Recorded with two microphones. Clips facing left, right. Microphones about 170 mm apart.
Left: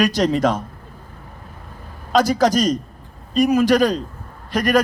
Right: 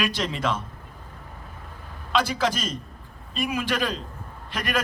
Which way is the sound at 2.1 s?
40° left (ahead or behind).